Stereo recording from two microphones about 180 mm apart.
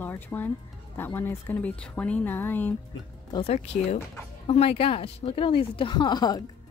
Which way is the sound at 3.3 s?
35° left (ahead or behind).